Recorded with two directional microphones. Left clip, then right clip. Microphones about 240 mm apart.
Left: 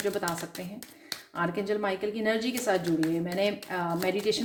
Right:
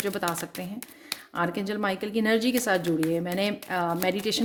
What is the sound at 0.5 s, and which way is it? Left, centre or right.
Speech, right.